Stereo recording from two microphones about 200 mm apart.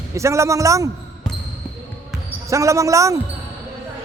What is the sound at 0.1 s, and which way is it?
Speech, 15° right (ahead or behind).